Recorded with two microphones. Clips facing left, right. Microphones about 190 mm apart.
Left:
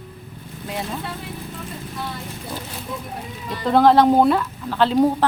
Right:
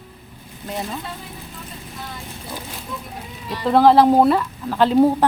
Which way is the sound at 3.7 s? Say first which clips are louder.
Right 1 dB; centre (ahead or behind).